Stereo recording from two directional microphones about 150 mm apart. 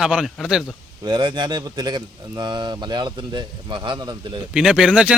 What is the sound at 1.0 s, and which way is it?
Speech, 30° right (ahead or behind).